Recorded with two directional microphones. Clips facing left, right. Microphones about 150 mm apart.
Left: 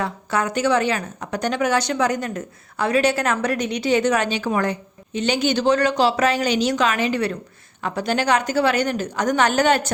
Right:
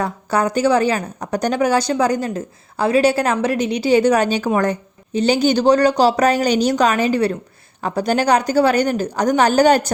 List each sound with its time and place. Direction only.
0.0 s a woman's voice: 35° right (ahead or behind)